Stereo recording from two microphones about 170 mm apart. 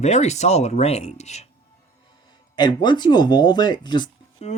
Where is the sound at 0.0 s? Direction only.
40° left (ahead or behind).